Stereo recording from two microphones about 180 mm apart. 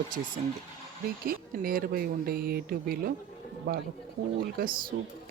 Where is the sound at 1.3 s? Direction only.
55° right (ahead or behind).